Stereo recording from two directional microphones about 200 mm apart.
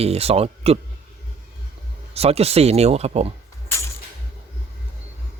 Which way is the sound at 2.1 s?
30° right (ahead or behind).